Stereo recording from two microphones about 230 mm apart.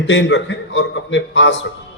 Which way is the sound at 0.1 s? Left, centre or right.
Left.